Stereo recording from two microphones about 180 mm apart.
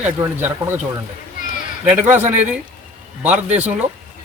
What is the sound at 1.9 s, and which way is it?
Speech, 10° right (ahead or behind).